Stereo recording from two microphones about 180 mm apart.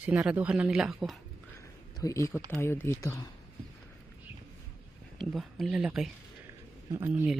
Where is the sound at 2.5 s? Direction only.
10° left (ahead or behind).